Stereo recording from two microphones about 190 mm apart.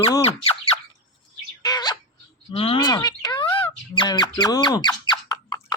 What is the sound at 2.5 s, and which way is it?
Speech, 25° left (ahead or behind).